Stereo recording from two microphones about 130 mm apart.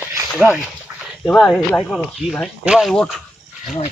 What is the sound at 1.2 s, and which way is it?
Speech, 5° left (ahead or behind).